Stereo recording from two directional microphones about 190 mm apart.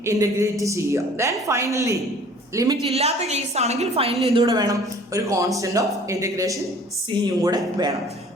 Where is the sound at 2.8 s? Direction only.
35° right (ahead or behind).